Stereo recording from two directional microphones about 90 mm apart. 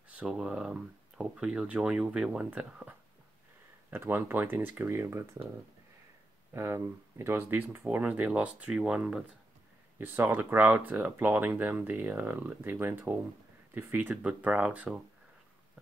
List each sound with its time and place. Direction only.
0.1 s speech: 10° right (ahead or behind)
3.9 s speech: 25° right (ahead or behind)
6.5 s speech: 30° right (ahead or behind); by 9.2 s 10° right (ahead or behind)
9.9 s speech: 25° right (ahead or behind)